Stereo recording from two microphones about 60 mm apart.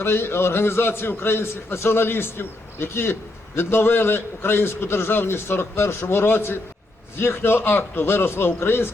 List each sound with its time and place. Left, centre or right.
0.0 s a man's voice: left